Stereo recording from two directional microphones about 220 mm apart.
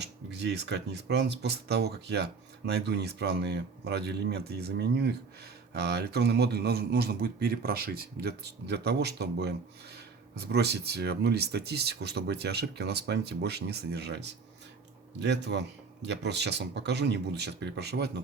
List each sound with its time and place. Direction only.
0.0 s speech: 50° right (ahead or behind)